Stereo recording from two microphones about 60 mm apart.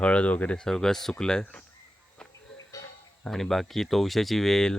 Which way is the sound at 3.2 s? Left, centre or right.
Centre.